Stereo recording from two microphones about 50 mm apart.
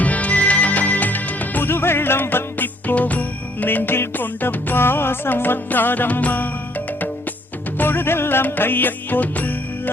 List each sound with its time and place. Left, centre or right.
0.0 s music: left